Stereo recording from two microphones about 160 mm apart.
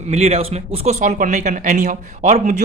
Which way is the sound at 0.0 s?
40° right (ahead or behind).